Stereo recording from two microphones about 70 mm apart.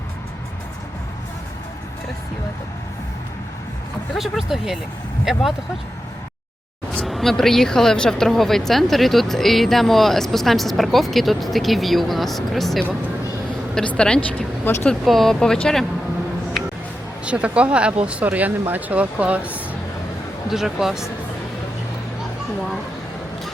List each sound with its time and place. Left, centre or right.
4.1 s speech: centre
7.0 s speech: centre
13.7 s a woman's voice: centre
14.7 s speech: left
15.0 s speech: centre
17.2 s speech: centre
20.5 s speech: centre